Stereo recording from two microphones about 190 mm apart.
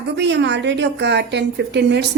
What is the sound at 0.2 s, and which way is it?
A woman's voice, 65° right (ahead or behind).